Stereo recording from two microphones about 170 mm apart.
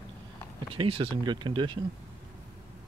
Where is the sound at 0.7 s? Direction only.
30° right (ahead or behind).